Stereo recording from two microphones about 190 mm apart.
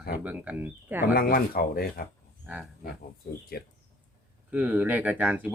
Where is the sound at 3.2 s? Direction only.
55° left (ahead or behind).